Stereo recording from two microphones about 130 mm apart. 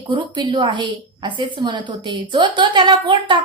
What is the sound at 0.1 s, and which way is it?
A woman's voice, 35° right (ahead or behind).